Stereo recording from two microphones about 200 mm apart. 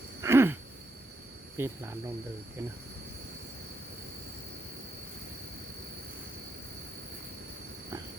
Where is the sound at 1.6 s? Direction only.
10° right (ahead or behind).